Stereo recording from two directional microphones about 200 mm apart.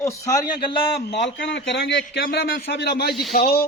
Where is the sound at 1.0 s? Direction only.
60° left (ahead or behind).